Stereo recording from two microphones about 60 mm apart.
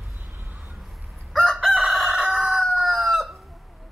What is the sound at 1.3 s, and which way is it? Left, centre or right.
Chicken, centre.